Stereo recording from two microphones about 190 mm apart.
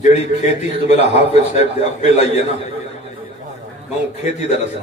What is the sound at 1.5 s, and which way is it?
Speech, 35° left (ahead or behind).